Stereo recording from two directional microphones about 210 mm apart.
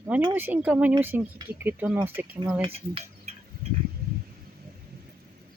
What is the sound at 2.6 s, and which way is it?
Cutlery, 30° right (ahead or behind).